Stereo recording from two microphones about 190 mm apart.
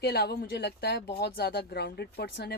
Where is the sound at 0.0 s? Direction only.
55° left (ahead or behind).